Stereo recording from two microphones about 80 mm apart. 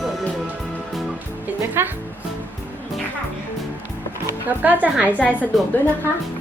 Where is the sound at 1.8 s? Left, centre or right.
Right.